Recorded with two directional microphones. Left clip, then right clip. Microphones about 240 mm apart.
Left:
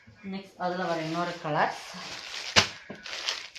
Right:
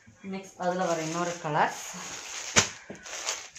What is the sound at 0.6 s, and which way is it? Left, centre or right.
Speech, right.